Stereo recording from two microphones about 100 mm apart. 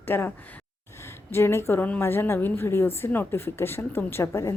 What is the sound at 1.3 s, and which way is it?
A woman's voice, 25° left (ahead or behind).